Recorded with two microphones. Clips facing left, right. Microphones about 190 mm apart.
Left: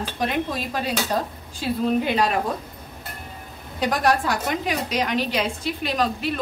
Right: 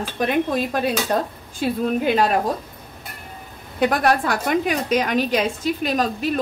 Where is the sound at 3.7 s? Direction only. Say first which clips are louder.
Right 3 dB; 55° right (ahead or behind).